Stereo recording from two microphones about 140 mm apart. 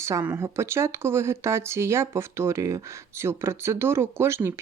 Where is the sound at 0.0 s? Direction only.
20° right (ahead or behind).